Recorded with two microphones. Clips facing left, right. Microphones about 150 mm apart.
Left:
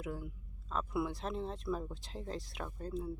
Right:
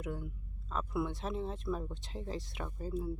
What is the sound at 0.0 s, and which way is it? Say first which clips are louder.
Speech: right 1 dB; centre (ahead or behind).